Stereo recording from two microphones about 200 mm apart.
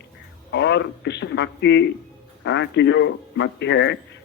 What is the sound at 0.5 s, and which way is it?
A man's voice, 60° left (ahead or behind).